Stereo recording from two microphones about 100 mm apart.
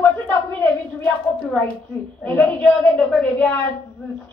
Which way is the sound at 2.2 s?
15° left (ahead or behind).